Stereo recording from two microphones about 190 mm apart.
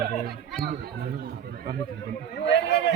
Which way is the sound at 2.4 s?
65° left (ahead or behind).